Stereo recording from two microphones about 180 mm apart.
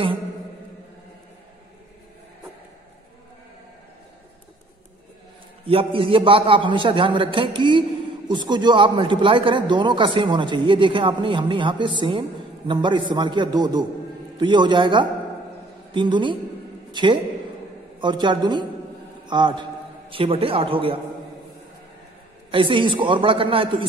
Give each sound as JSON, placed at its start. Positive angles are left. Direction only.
{"t": 5.7, "sound": "a man's voice", "side_deg": -30}
{"t": 22.5, "sound": "speech", "side_deg": -30}